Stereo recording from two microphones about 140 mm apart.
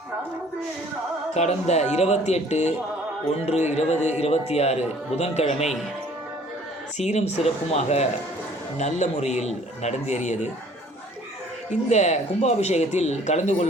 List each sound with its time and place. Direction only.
1.3 s speech: 50° left (ahead or behind)
7.0 s a man's voice: 55° left (ahead or behind)
11.7 s speech: 55° left (ahead or behind)